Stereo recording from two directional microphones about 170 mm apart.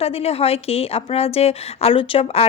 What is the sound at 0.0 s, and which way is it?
A woman's voice, 35° left (ahead or behind).